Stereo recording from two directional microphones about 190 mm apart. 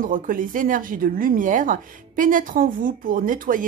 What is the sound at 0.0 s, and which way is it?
Speech, 45° right (ahead or behind).